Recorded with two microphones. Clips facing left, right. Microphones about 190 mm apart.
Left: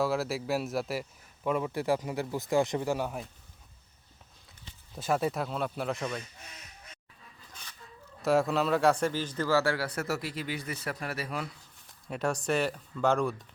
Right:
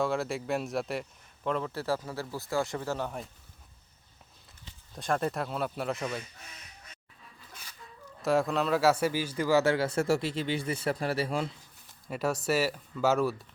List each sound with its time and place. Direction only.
0.0 s a man's voice: centre (ahead or behind)
4.9 s speech: 5° left (ahead or behind)
8.2 s a man's voice: centre (ahead or behind); by 11.5 s 30° right (ahead or behind)
11.9 s speech: centre (ahead or behind)